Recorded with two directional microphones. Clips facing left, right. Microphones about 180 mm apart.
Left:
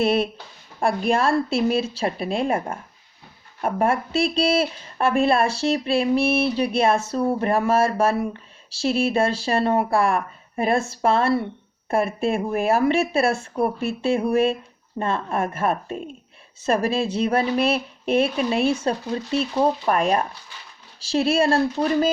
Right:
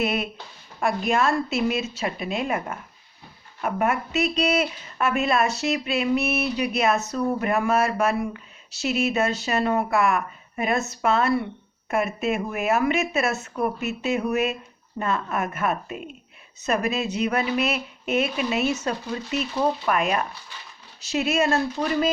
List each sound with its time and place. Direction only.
0.0 s speech: 30° left (ahead or behind)